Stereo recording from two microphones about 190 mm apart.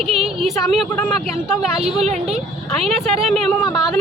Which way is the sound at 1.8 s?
35° right (ahead or behind).